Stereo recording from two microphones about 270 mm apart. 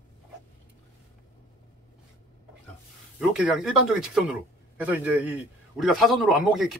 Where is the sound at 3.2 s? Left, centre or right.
Centre.